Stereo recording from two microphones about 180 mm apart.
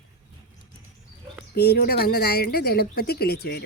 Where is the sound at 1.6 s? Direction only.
60° left (ahead or behind).